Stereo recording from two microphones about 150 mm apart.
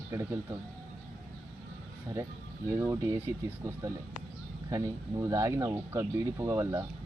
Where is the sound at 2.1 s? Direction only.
25° right (ahead or behind).